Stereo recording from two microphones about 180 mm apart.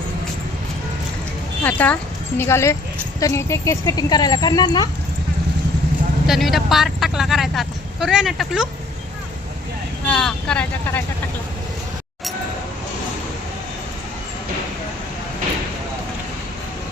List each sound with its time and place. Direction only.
1.6 s speech: 10° left (ahead or behind)
6.2 s speech: centre (ahead or behind)
10.1 s speech: 5° left (ahead or behind)